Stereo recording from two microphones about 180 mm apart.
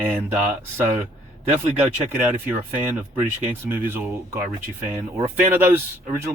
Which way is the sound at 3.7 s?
10° right (ahead or behind).